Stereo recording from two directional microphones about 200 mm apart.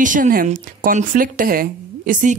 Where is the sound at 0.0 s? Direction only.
40° right (ahead or behind).